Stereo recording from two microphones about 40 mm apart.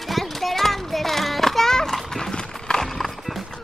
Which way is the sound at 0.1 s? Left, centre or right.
Centre.